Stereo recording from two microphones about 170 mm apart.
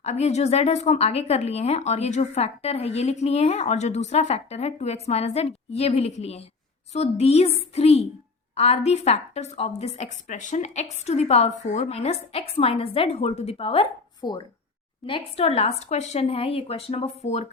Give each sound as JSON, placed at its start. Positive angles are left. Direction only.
{"t": 0.0, "sound": "a woman's voice", "side_deg": 40}